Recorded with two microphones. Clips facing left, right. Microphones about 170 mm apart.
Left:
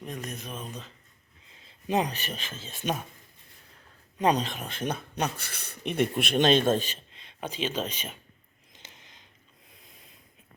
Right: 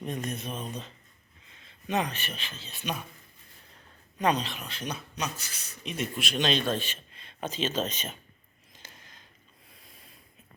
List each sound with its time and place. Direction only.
0.0 s speech: centre (ahead or behind)
1.9 s speech: 35° left (ahead or behind)
4.2 s speech: 40° left (ahead or behind)
7.1 s speech: 20° left (ahead or behind)
8.7 s a sound: 20° left (ahead or behind)